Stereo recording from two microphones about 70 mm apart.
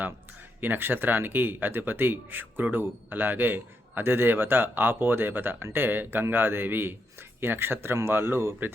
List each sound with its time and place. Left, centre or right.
0.6 s speech: right